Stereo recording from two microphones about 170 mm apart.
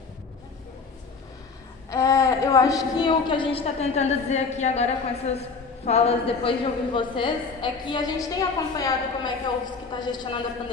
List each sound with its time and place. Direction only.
1.9 s a woman's voice: 15° left (ahead or behind)